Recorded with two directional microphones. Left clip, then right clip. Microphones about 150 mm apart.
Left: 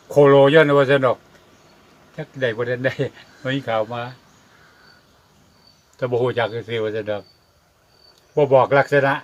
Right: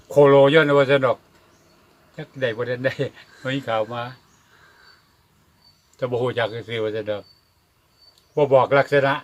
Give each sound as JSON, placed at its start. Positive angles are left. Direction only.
{"t": 0.1, "sound": "speech", "side_deg": 10}
{"t": 6.0, "sound": "speech", "side_deg": 10}
{"t": 8.4, "sound": "speech", "side_deg": 5}